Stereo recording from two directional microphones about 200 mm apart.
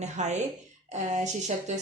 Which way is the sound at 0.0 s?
35° right (ahead or behind).